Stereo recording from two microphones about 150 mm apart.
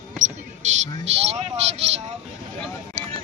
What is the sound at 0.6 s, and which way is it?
Music, 55° right (ahead or behind).